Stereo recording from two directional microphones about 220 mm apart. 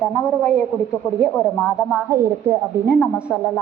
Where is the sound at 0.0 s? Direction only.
Centre (ahead or behind).